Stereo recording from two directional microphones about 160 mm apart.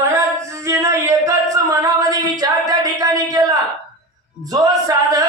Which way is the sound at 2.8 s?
25° right (ahead or behind).